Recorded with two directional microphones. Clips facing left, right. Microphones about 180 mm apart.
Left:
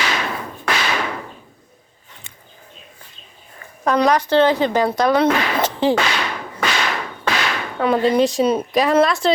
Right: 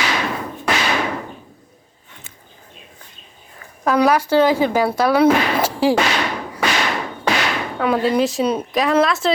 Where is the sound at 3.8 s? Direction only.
5° right (ahead or behind).